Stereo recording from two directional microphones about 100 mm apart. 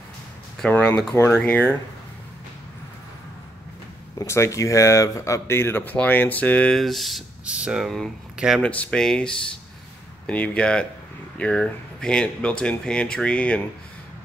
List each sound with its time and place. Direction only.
0.7 s speech: 15° left (ahead or behind)
1.1 s speech: 25° left (ahead or behind)
4.2 s speech: 30° left (ahead or behind)
6.7 s speech: centre (ahead or behind)
7.4 s speech: 10° right (ahead or behind)
8.6 s speech: 10° left (ahead or behind)